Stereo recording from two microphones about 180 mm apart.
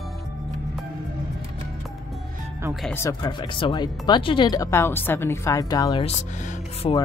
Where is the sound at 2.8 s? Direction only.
10° left (ahead or behind).